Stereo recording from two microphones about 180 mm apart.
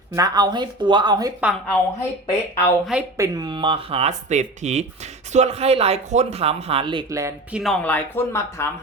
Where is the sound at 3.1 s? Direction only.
20° right (ahead or behind).